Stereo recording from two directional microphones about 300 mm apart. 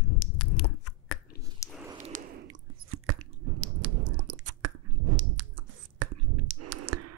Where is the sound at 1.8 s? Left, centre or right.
Centre.